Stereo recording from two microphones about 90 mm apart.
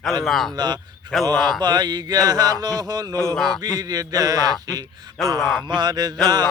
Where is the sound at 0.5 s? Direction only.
50° right (ahead or behind).